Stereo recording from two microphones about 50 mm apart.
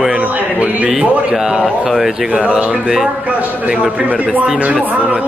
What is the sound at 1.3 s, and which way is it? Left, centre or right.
Speech, centre.